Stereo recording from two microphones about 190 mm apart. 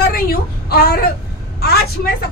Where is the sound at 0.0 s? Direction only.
55° left (ahead or behind).